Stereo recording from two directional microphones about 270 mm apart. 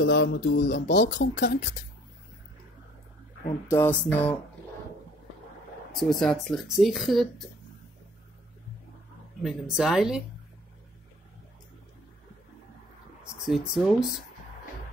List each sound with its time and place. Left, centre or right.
0.0 s speech: left
3.6 s speech: centre
5.9 s speech: centre
9.4 s speech: centre
13.5 s speech: centre